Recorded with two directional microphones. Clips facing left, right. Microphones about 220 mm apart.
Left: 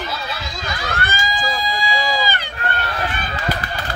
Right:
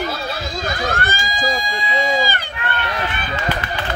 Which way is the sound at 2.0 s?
45° right (ahead or behind).